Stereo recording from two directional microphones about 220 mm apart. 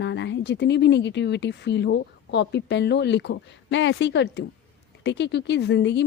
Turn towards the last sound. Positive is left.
turn(degrees=50)  # may be behind; listen again after turning